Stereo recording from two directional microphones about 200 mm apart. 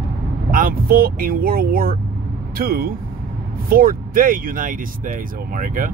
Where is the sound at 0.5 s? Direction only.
45° right (ahead or behind).